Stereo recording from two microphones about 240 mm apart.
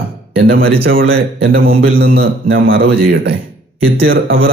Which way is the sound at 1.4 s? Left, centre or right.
Right.